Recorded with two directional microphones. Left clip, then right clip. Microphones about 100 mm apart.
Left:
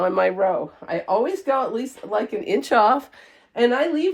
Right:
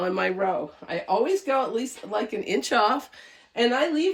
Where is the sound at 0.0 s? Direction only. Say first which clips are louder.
Left 6 dB; 50° left (ahead or behind).